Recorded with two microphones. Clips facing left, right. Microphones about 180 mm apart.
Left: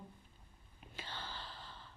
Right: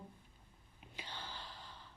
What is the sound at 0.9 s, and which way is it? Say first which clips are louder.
Gasp: left 1 dB; 15° right (ahead or behind).